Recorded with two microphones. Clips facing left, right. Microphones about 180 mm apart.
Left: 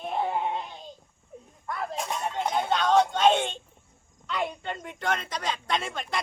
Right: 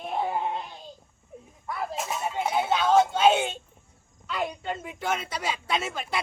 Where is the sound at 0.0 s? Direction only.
Centre (ahead or behind).